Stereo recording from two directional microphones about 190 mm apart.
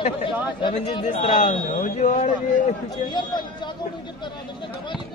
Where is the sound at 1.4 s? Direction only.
40° left (ahead or behind).